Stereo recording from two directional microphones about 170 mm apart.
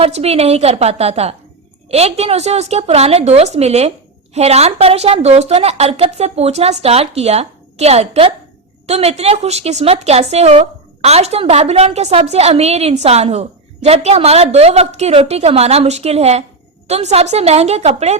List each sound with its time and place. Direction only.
0.0 s a woman's voice: 35° right (ahead or behind)